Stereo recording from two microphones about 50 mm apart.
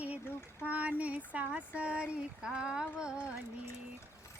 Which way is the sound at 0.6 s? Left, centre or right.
Right.